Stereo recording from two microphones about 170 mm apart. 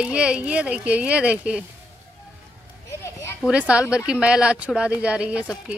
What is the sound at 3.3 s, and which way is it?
Speech, 5° right (ahead or behind).